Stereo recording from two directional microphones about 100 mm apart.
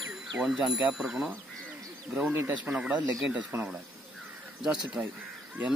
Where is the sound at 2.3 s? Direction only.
20° right (ahead or behind).